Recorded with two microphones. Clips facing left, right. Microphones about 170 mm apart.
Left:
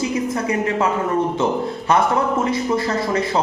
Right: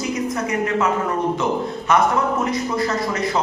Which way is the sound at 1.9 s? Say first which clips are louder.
Left 1 dB; 30° left (ahead or behind).